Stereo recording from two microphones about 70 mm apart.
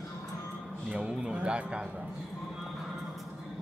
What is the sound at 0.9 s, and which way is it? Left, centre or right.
Speech, centre.